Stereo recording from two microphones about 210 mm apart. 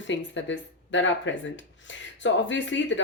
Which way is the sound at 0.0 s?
60° left (ahead or behind).